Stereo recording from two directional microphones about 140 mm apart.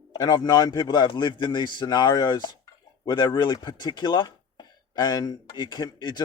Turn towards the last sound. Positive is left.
turn(degrees=30)  # may be behind; listen again after turning